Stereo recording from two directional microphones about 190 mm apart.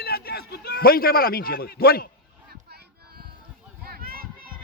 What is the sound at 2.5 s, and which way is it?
Child singing, 55° right (ahead or behind).